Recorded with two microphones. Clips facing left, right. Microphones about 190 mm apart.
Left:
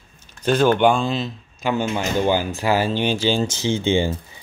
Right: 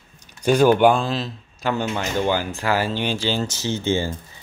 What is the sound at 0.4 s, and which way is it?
Speech, 10° right (ahead or behind).